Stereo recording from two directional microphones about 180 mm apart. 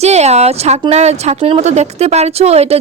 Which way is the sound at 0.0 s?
35° right (ahead or behind).